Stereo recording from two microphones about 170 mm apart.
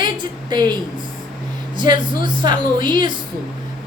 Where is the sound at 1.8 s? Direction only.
50° left (ahead or behind).